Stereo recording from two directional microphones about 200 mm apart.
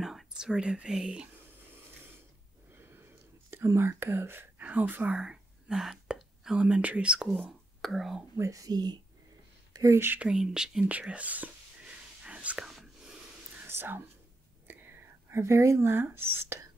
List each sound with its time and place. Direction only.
0.0 s speech: centre (ahead or behind)
2.7 s whispering: 10° right (ahead or behind)
8.4 s speech: 15° right (ahead or behind)
9.7 s whispering: 15° right (ahead or behind)
13.7 s speech: 10° right (ahead or behind)